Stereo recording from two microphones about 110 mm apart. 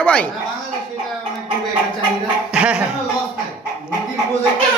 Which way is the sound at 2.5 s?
10° right (ahead or behind).